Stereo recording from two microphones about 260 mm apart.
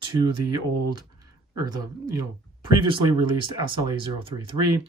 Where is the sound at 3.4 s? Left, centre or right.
Centre.